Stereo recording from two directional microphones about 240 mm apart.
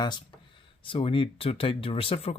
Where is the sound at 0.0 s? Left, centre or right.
Centre.